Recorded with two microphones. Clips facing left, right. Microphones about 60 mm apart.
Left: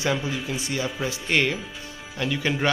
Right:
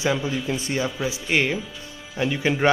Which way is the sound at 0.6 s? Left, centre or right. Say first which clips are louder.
Right 3 dB; right.